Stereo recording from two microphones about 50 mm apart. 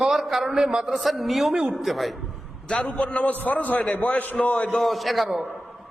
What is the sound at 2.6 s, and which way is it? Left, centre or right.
A man's voice, left.